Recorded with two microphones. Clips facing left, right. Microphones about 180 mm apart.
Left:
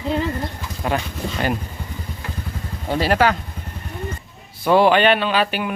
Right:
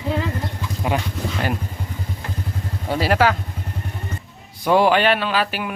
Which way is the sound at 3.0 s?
5° right (ahead or behind).